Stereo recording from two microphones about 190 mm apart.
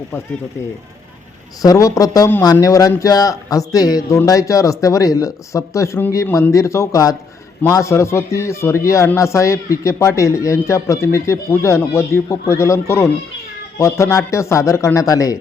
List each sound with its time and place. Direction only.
1.6 s a man's voice: 20° left (ahead or behind)